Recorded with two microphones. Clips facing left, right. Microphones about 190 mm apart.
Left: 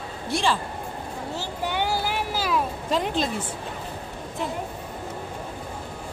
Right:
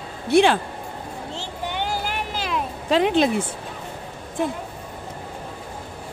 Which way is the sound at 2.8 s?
80° right.